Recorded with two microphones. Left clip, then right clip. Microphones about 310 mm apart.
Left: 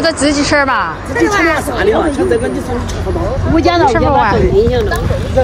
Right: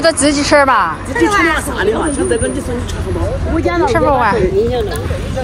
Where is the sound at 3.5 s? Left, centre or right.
Left.